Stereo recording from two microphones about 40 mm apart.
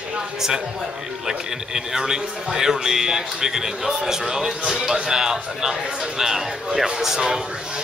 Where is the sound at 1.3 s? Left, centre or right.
Centre.